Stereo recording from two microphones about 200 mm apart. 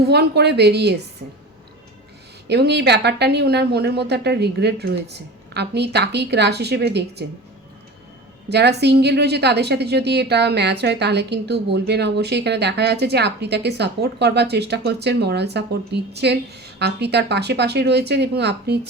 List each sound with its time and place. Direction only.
0.0 s a woman's voice: 55° right (ahead or behind)
2.5 s a woman's voice: 55° right (ahead or behind)
8.4 s a woman's voice: 55° right (ahead or behind)